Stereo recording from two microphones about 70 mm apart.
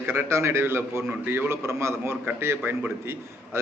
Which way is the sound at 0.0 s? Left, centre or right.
Right.